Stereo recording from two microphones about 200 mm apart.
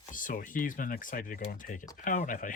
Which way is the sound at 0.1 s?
40° left (ahead or behind).